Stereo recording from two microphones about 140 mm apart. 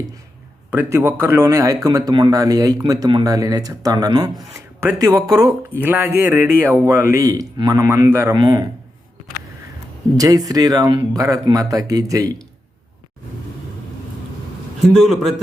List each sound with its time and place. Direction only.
0.7 s speech: 15° right (ahead or behind)
10.2 s speech: 25° right (ahead or behind)
14.9 s a man's voice: centre (ahead or behind)